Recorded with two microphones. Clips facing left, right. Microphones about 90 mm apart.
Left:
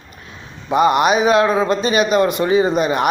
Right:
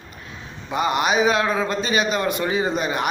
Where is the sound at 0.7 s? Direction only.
50° left (ahead or behind).